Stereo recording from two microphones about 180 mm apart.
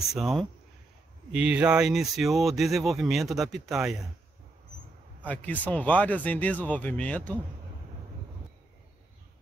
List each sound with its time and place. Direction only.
0.1 s speech: centre (ahead or behind)
5.2 s speech: 10° left (ahead or behind)